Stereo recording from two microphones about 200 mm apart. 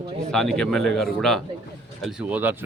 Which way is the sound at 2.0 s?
10° right (ahead or behind).